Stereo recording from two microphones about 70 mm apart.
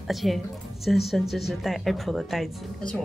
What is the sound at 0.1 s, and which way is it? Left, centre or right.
Speech, centre.